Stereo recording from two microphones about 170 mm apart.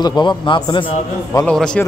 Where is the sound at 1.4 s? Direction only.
5° left (ahead or behind).